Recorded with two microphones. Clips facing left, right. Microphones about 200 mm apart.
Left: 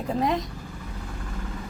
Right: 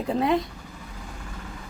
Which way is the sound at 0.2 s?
30° right (ahead or behind).